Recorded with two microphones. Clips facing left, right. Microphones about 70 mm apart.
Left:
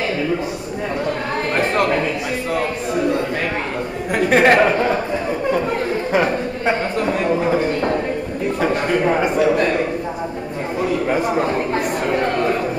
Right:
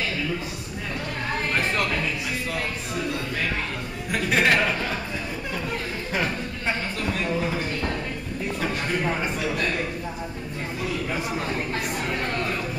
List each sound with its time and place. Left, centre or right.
1.6 s speech: left
4.1 s speech: left
6.1 s a sound: left
8.8 s a man's voice: left
11.1 s speech: left